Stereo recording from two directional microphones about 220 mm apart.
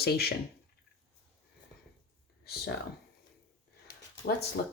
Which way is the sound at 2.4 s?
45° left (ahead or behind).